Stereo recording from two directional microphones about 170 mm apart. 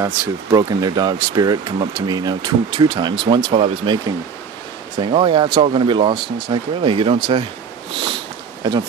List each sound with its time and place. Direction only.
0.0 s speech: 20° right (ahead or behind)
5.0 s speech: 30° right (ahead or behind)